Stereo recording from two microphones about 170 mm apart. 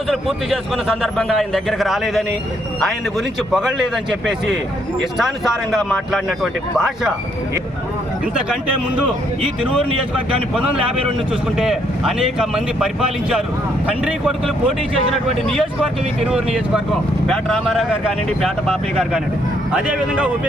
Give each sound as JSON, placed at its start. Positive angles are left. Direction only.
{"t": 0.1, "sound": "a man's voice", "side_deg": 0}
{"t": 3.5, "sound": "a man's voice", "side_deg": -5}
{"t": 6.1, "sound": "a man's voice", "side_deg": 0}
{"t": 9.4, "sound": "speech", "side_deg": -30}
{"t": 11.5, "sound": "a man's voice", "side_deg": -5}